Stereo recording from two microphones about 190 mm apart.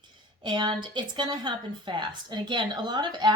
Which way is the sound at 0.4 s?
25° right (ahead or behind).